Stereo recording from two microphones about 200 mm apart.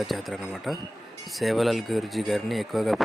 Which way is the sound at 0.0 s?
Centre (ahead or behind).